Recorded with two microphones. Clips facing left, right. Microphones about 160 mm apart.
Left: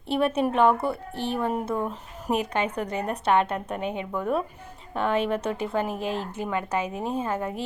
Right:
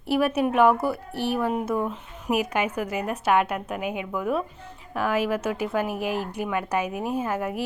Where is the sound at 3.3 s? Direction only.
30° left (ahead or behind).